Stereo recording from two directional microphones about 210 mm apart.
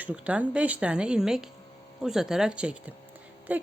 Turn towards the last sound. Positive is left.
turn(degrees=-5)  # may be behind; listen again after turning